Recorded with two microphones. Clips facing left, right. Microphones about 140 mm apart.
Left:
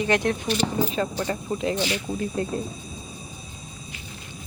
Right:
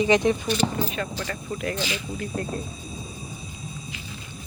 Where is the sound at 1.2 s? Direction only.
25° left (ahead or behind).